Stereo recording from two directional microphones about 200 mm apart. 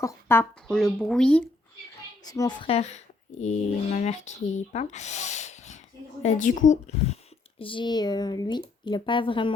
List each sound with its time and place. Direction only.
0.0 s speech: 15° left (ahead or behind)
2.2 s speech: 15° left (ahead or behind); by 7.2 s 40° left (ahead or behind)
7.6 s speech: 25° left (ahead or behind)